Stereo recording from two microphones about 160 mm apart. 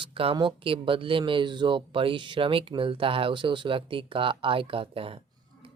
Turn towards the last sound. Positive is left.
turn(degrees=-35)  # may be behind; listen again after turning